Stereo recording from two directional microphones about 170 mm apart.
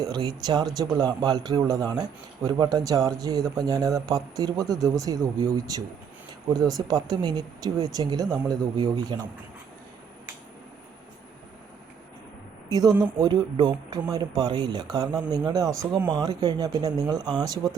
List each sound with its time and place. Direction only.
0.0 s a man's voice: 25° right (ahead or behind)
13.0 s a man's voice: 25° right (ahead or behind)